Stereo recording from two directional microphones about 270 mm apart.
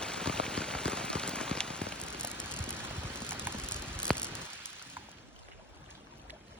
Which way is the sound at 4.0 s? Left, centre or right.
Centre.